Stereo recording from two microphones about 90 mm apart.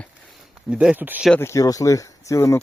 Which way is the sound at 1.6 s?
40° left (ahead or behind).